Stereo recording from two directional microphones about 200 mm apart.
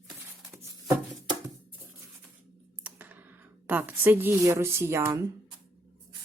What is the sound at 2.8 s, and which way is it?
Speech, 10° right (ahead or behind).